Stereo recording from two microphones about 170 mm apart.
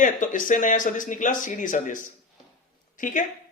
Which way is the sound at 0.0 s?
50° left (ahead or behind).